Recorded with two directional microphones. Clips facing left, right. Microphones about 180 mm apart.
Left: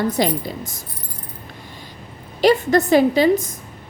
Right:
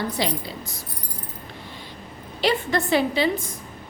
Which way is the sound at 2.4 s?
45° left (ahead or behind).